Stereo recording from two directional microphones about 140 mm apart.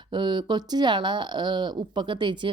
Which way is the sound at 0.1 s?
35° right (ahead or behind).